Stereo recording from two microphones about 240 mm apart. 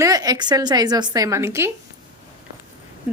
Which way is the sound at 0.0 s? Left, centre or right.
Centre.